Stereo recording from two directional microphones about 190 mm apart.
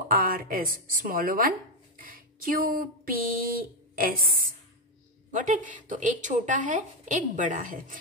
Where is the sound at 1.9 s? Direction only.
50° right (ahead or behind).